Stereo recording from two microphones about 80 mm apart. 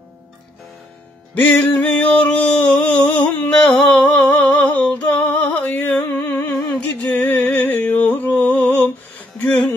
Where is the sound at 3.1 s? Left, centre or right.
Centre.